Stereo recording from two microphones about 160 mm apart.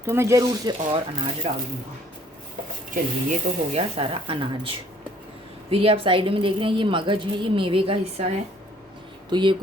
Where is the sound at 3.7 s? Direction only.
40° right (ahead or behind).